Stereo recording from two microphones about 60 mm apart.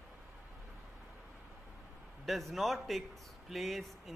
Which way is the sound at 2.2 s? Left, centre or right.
Centre.